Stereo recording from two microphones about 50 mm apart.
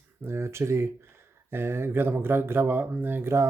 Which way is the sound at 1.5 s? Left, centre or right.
Right.